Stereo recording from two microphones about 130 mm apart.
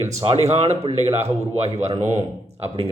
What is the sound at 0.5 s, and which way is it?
Speech, 55° right (ahead or behind).